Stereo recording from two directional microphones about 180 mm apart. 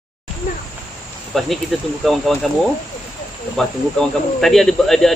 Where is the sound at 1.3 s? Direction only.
Centre (ahead or behind).